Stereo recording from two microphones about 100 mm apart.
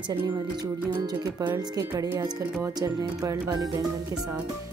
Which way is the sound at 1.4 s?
40° right (ahead or behind).